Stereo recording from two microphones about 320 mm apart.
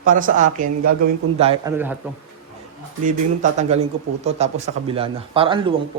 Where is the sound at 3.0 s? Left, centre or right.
Right.